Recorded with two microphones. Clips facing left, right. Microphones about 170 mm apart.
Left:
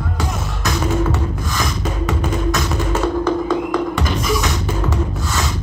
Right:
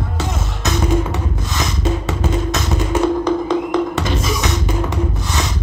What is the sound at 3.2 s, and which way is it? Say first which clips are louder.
Music: right 1 dB; 20° right (ahead or behind).